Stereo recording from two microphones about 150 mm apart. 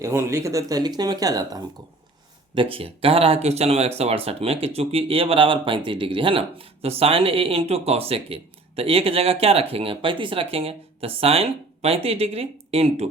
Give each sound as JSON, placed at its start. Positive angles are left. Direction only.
{"t": 0.0, "sound": "speech", "side_deg": -20}
{"t": 2.6, "sound": "speech", "side_deg": -40}